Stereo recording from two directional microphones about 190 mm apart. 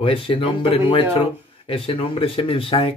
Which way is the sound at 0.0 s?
30° left (ahead or behind).